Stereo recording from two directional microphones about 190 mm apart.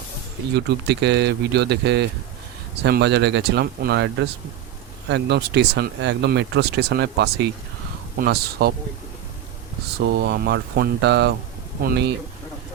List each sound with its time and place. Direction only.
0.5 s speech: 60° right (ahead or behind)
10.0 s speech: 60° right (ahead or behind)